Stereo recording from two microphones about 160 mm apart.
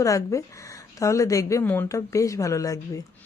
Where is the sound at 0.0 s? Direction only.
20° left (ahead or behind).